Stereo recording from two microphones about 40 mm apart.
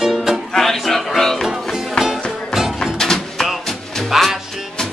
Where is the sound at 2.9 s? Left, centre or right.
Centre.